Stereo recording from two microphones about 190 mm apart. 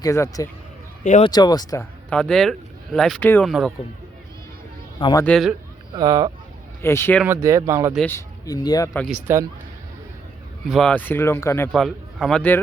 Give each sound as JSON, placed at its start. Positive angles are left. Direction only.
{"t": 0.0, "sound": "speech", "side_deg": 15}
{"t": 1.0, "sound": "speech", "side_deg": 40}
{"t": 1.3, "sound": "speech", "side_deg": 20}
{"t": 2.0, "sound": "speech", "side_deg": 5}
{"t": 4.9, "sound": "speech", "side_deg": 25}
{"t": 5.2, "sound": "speech", "side_deg": 0}
{"t": 5.9, "sound": "speech", "side_deg": -20}
{"t": 6.8, "sound": "speech", "side_deg": 15}
{"t": 7.3, "sound": "speech", "side_deg": -15}
{"t": 7.9, "sound": "speech", "side_deg": 10}
{"t": 9.0, "sound": "speech", "side_deg": -10}
{"t": 10.7, "sound": "speech", "side_deg": 5}
{"t": 11.7, "sound": "speech", "side_deg": 0}